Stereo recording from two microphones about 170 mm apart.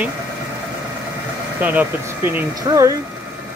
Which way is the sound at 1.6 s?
10° right (ahead or behind).